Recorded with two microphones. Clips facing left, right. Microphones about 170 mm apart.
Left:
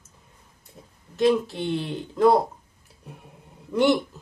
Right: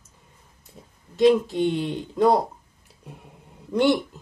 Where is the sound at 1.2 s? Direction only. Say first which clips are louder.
Right 3 dB; 15° right (ahead or behind).